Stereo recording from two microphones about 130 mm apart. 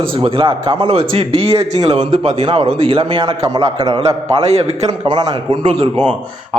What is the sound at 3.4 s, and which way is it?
Speech, 30° right (ahead or behind).